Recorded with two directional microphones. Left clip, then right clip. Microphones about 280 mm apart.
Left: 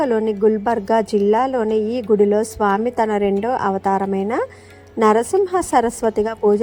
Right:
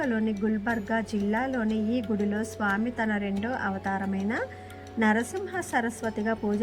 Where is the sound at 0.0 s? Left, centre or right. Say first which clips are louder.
Left 13 dB; centre.